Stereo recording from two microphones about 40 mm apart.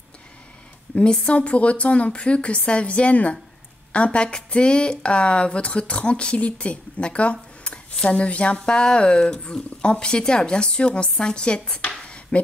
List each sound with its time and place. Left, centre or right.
1.3 s a woman's voice: left
12.0 s dishes: left